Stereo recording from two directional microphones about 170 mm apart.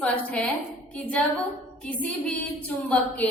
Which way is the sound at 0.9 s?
10° left (ahead or behind).